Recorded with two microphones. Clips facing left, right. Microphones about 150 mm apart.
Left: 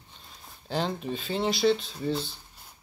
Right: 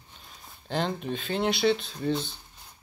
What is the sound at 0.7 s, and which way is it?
Speech, centre (ahead or behind).